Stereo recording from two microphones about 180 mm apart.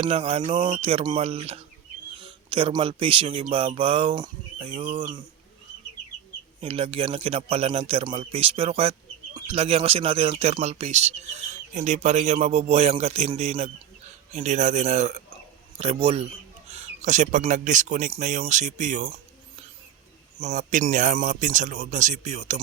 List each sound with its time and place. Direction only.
0.0 s a man's voice: 30° right (ahead or behind)
6.6 s a man's voice: 30° right (ahead or behind)
20.4 s a man's voice: 45° right (ahead or behind)